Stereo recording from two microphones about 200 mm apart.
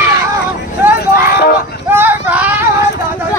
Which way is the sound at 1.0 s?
50° left (ahead or behind).